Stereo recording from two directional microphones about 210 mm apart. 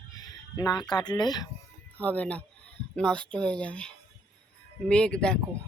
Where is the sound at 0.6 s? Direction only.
20° left (ahead or behind).